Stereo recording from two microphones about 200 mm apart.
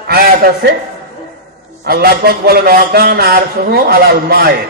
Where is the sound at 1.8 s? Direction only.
50° right (ahead or behind).